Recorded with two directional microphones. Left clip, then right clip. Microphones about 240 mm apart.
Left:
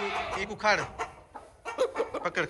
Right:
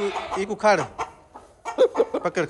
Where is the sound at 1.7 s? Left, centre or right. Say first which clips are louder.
Right 10 dB; right.